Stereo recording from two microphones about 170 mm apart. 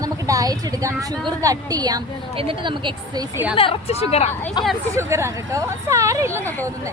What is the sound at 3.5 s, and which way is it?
Speech, 30° left (ahead or behind).